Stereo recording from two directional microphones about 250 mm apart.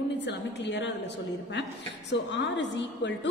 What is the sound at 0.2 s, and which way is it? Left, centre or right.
Speech, left.